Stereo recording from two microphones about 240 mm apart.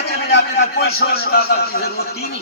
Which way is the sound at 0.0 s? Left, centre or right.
Left.